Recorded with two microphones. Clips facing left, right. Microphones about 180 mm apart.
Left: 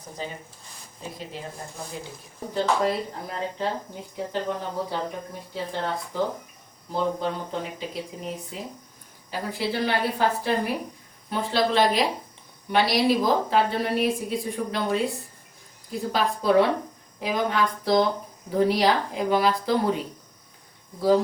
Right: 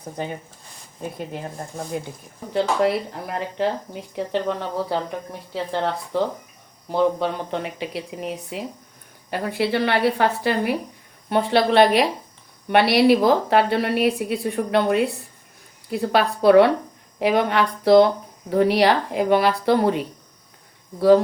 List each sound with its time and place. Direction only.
0.2 s speech: 60° right (ahead or behind)
2.5 s speech: 75° right (ahead or behind)
6.1 s speech: 70° right (ahead or behind)